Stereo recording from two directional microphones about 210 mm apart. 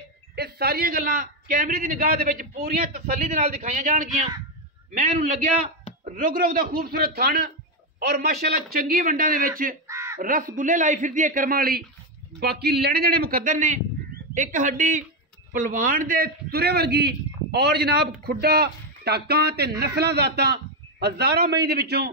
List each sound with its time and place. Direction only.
0.4 s a man's voice: 50° right (ahead or behind)
9.8 s a sound: 15° right (ahead or behind)
10.2 s a man's voice: 40° right (ahead or behind)